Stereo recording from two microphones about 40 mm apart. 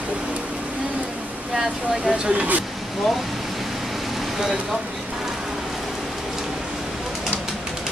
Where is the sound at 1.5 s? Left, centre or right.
Centre.